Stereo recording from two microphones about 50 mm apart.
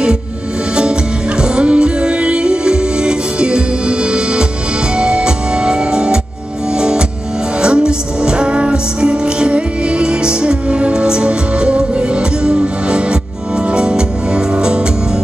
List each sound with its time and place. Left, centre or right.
1.4 s music: centre